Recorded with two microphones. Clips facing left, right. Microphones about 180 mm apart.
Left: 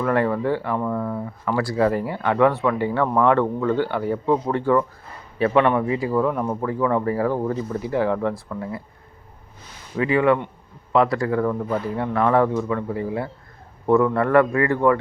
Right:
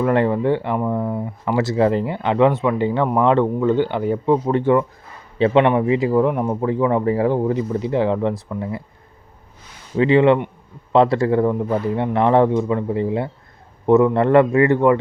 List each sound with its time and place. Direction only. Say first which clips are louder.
0.0 s speech: right 3 dB; 20° right (ahead or behind)
10.0 s speech: right 5 dB; 25° right (ahead or behind)